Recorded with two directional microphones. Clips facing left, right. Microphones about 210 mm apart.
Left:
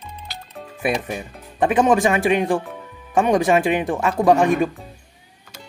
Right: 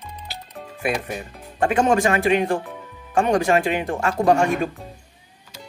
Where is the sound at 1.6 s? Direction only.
15° left (ahead or behind).